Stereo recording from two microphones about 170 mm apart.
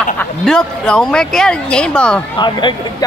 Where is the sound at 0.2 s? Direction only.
5° left (ahead or behind).